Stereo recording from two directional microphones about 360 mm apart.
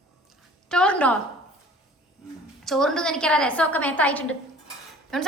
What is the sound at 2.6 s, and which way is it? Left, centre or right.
A woman's voice, centre.